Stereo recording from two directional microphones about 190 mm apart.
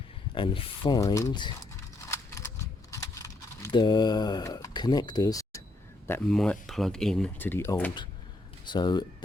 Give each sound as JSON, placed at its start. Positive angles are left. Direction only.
{"t": 0.3, "sound": "speech", "side_deg": 30}
{"t": 2.0, "sound": "a sound", "side_deg": 15}
{"t": 2.9, "sound": "typing", "side_deg": 15}
{"t": 6.1, "sound": "speech", "side_deg": 5}
{"t": 8.6, "sound": "speech", "side_deg": 25}